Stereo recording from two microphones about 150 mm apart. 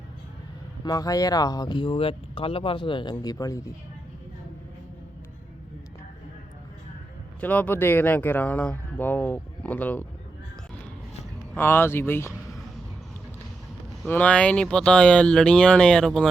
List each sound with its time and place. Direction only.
0.9 s speech: 25° left (ahead or behind)
7.4 s speech: 10° left (ahead or behind)
11.5 s speech: 15° left (ahead or behind)
14.1 s speech: 10° left (ahead or behind)